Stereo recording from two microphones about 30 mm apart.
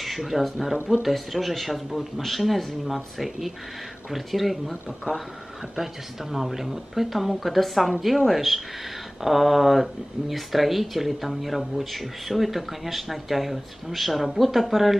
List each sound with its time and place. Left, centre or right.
0.0 s speech: centre
6.3 s speech: centre